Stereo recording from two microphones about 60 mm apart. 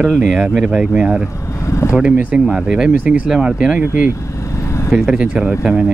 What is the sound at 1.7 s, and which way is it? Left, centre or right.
Vehicle, left.